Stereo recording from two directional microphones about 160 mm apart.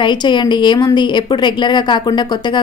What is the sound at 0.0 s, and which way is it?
A woman's voice, 30° left (ahead or behind).